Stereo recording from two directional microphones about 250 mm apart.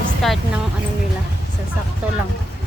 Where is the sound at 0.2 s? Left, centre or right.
Centre.